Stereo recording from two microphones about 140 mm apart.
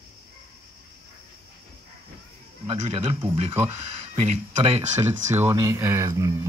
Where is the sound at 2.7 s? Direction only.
45° right (ahead or behind).